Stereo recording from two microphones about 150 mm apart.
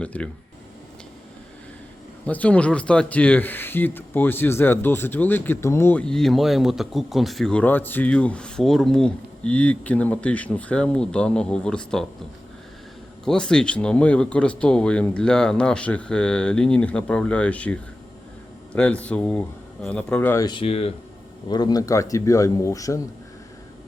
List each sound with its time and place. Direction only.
0.0 s speech: 5° left (ahead or behind)
2.2 s speech: 10° left (ahead or behind)
13.2 s speech: 5° left (ahead or behind)
20.3 s speech: 30° left (ahead or behind)
20.7 s speech: 45° left (ahead or behind)
21.5 s speech: 25° left (ahead or behind)